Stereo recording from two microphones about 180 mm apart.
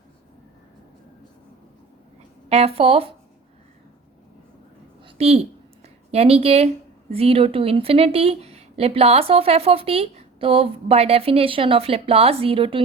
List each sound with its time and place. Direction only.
2.5 s speech: 35° right (ahead or behind)
5.0 s a sound: 35° right (ahead or behind)
7.1 s speech: 35° right (ahead or behind)